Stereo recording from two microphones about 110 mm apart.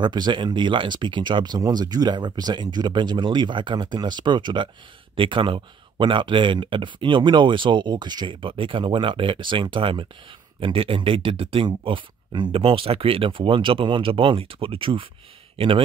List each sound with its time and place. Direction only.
0.0 s speech: 45° right (ahead or behind)